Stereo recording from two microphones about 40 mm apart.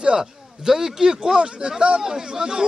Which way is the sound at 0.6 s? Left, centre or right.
Centre.